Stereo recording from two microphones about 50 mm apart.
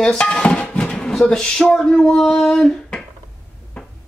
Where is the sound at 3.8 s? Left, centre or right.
Centre.